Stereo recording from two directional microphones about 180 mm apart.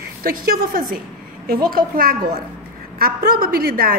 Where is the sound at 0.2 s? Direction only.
55° right (ahead or behind).